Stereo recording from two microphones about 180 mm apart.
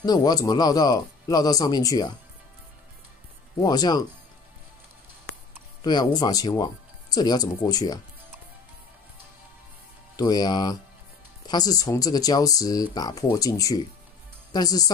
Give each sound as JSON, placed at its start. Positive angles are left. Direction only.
{"t": 0.0, "sound": "speech", "side_deg": 20}
{"t": 3.6, "sound": "speech", "side_deg": 20}
{"t": 5.9, "sound": "speech", "side_deg": 25}
{"t": 10.1, "sound": "speech", "side_deg": 25}